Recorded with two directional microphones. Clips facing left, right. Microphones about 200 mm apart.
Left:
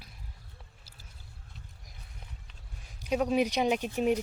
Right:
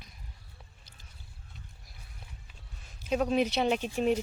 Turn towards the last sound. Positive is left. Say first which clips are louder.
# even
turn(degrees=10)  # may be behind; listen again after turning